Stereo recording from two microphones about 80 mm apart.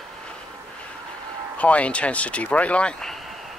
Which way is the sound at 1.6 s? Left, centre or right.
Centre.